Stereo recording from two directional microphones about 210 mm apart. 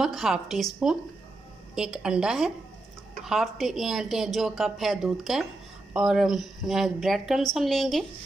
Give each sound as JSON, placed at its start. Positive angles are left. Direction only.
{"t": 0.0, "sound": "a woman's voice", "side_deg": 0}